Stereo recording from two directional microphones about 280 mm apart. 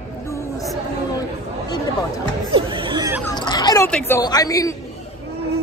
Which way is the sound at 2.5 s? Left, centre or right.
Centre.